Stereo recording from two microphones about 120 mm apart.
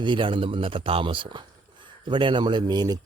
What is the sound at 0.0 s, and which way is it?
A man's voice, 45° right (ahead or behind).